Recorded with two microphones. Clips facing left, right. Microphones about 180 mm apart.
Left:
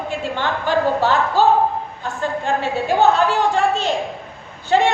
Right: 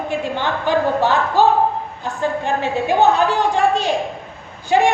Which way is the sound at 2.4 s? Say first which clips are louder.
Right 1 dB; 20° right (ahead or behind).